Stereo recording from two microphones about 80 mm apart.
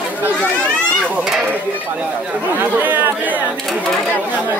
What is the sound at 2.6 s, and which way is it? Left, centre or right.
Speech, right.